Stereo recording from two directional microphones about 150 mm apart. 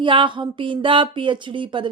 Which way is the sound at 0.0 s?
35° right (ahead or behind).